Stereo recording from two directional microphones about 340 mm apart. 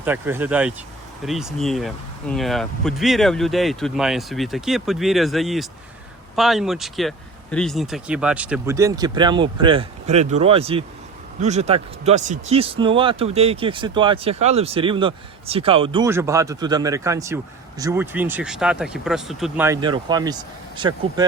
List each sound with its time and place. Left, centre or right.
0.0 s speech: centre